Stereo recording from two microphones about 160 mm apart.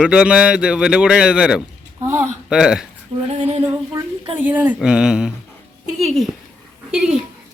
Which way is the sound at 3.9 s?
15° right (ahead or behind).